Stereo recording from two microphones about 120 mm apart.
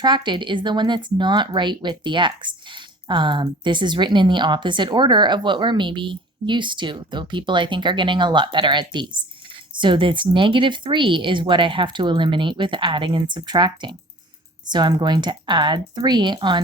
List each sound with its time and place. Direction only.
0.0 s speech: 40° right (ahead or behind)